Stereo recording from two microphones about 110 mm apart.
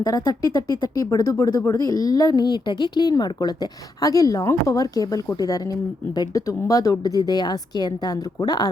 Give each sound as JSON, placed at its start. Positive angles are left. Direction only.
{"t": 0.0, "sound": "speech", "side_deg": 30}